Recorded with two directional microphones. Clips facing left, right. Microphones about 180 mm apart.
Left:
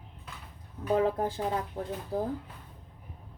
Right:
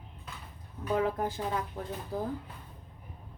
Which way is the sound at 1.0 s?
30° left (ahead or behind).